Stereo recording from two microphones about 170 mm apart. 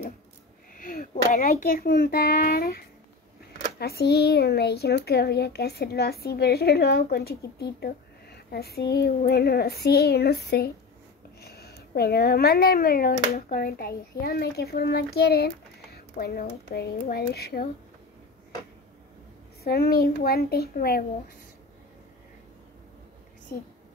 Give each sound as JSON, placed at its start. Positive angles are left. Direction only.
{"t": 0.7, "sound": "a child's voice", "side_deg": 55}
{"t": 3.8, "sound": "speech", "side_deg": 70}
{"t": 19.6, "sound": "a woman's voice", "side_deg": 65}